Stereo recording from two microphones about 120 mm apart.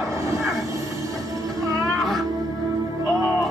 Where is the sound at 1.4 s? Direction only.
30° right (ahead or behind).